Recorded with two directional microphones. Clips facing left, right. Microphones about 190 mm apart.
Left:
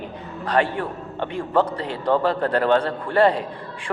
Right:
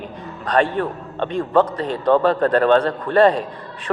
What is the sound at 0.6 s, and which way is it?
Speech, 10° left (ahead or behind).